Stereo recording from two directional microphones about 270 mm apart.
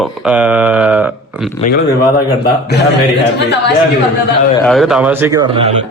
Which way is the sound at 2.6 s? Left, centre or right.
Left.